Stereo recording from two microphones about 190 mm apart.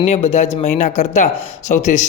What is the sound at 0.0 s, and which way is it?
Speech, 35° left (ahead or behind).